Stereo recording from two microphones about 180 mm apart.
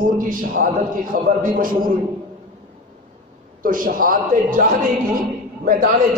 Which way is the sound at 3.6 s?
50° right (ahead or behind).